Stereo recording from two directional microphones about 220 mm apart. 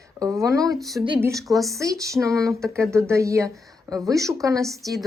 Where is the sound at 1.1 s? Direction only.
10° right (ahead or behind).